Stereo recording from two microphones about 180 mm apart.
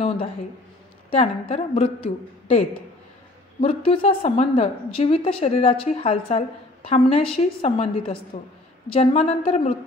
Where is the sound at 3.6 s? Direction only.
30° left (ahead or behind).